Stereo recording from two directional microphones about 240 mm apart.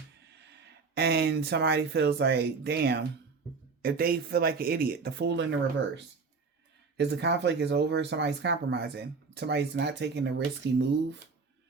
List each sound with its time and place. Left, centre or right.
0.3 s speech: right